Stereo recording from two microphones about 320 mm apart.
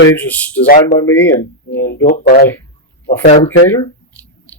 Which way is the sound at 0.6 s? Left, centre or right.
Left.